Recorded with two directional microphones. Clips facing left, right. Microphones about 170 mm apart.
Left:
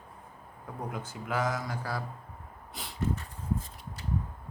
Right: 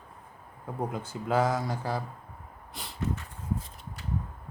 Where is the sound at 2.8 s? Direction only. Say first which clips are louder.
Even; centre (ahead or behind).